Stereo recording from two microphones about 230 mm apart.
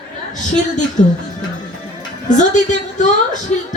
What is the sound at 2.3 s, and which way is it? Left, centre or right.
Speech, left.